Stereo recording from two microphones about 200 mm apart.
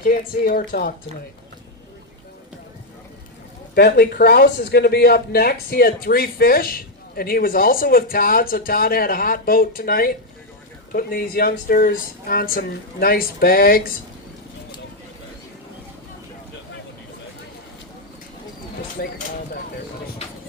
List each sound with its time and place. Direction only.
0.0 s speech: 45° left (ahead or behind)
3.8 s speech: 55° left (ahead or behind)
19.0 s speech: 45° left (ahead or behind)